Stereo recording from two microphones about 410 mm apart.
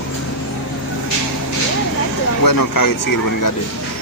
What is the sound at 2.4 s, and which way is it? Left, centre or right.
Speech, left.